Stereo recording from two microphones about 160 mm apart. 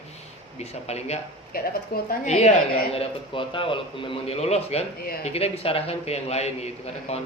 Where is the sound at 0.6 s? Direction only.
40° left (ahead or behind).